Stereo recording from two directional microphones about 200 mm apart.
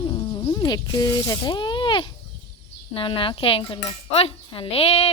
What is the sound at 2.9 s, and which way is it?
Cutlery, 25° left (ahead or behind).